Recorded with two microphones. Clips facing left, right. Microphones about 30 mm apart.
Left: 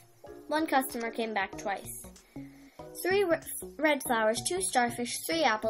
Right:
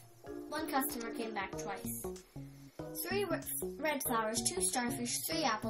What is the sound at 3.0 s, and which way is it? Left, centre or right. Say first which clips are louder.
Speech: left 9 dB; left.